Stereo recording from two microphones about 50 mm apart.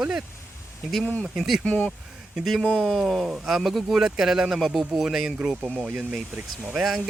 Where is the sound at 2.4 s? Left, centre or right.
Centre.